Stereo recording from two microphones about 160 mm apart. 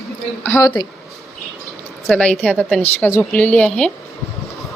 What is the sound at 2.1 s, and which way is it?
A woman's voice, 5° left (ahead or behind).